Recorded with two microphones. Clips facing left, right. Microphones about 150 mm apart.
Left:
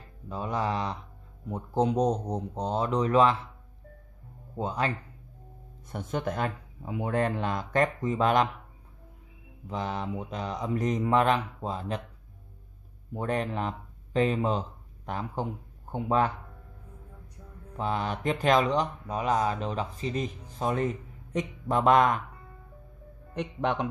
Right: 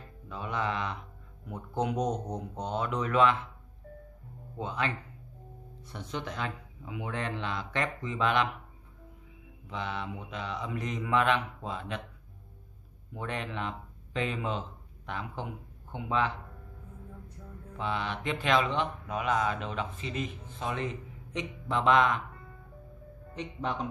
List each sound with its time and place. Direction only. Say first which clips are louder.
0.3 s speech: left 3 dB; 35° left (ahead or behind)
4.6 s speech: left 4 dB; 40° left (ahead or behind)
9.7 s speech: left 4 dB; 40° left (ahead or behind)
13.1 s speech: left 6 dB; 40° left (ahead or behind)
17.7 s speech: left 3 dB; 40° left (ahead or behind)
23.3 s speech: left 5 dB; 65° left (ahead or behind)